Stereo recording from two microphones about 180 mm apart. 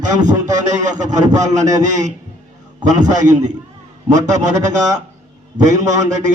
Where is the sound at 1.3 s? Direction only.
20° right (ahead or behind).